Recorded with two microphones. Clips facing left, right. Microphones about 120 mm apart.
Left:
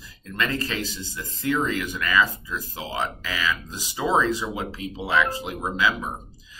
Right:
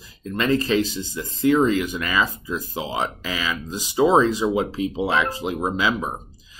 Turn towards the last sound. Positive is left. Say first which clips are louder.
# right 2 dB
turn(degrees=-20)  # may be behind; listen again after turning